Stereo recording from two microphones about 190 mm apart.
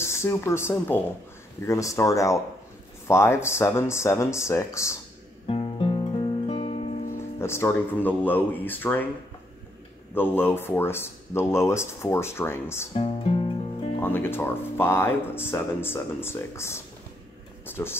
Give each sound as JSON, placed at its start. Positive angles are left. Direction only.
{"t": 0.0, "sound": "speech", "side_deg": 15}
{"t": 5.5, "sound": "music", "side_deg": 30}
{"t": 7.2, "sound": "speech", "side_deg": 15}
{"t": 10.1, "sound": "speech", "side_deg": 10}
{"t": 12.9, "sound": "speech", "side_deg": 30}
{"t": 13.9, "sound": "speech", "side_deg": 10}